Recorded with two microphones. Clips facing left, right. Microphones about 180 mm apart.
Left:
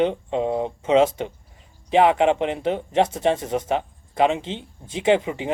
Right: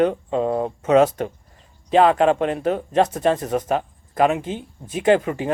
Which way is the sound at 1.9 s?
20° left (ahead or behind).